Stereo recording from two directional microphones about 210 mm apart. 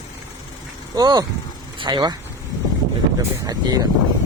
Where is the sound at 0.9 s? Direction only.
20° right (ahead or behind).